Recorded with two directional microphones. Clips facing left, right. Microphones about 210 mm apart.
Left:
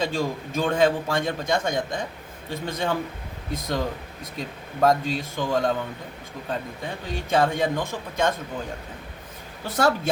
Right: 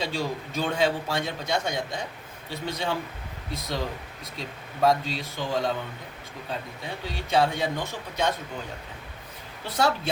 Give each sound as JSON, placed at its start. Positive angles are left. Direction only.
{"t": 0.0, "sound": "a man's voice", "side_deg": 50}
{"t": 9.6, "sound": "a man's voice", "side_deg": 45}